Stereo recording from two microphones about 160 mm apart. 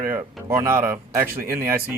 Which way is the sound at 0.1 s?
15° right (ahead or behind).